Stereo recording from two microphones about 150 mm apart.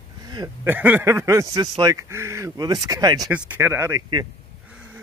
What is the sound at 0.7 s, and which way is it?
Speech, 10° right (ahead or behind).